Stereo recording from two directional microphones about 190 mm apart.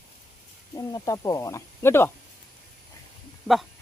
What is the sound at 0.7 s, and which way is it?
Speech, 20° left (ahead or behind).